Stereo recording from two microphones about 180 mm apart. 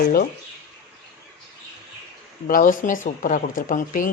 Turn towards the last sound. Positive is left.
turn(degrees=50)  # may be behind; listen again after turning